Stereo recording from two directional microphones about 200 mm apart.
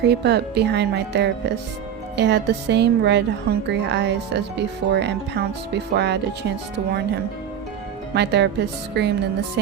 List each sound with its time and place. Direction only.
0.0 s a woman's voice: 55° right (ahead or behind)
8.1 s a woman's voice: 55° right (ahead or behind)